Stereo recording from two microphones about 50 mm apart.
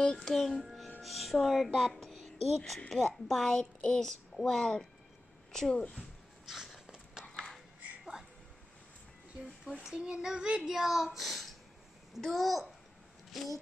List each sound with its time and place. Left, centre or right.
0.0 s music: centre
1.0 s speech: centre
6.4 s a sound: centre
8.0 s music: centre
9.9 s child singing: centre
10.2 s speech: centre